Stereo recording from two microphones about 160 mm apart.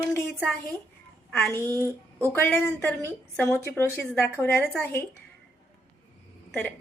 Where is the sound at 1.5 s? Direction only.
15° left (ahead or behind).